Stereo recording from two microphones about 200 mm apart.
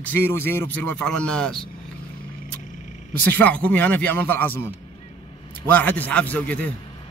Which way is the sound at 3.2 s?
10° left (ahead or behind).